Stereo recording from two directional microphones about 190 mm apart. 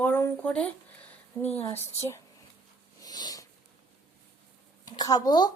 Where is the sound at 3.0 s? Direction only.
20° left (ahead or behind).